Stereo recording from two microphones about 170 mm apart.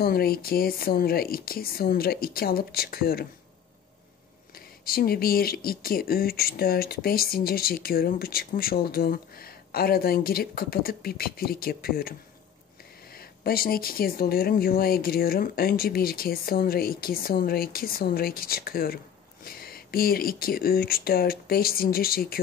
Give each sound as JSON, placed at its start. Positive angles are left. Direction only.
{"t": 0.0, "sound": "speech", "side_deg": 65}
{"t": 4.8, "sound": "speech", "side_deg": 60}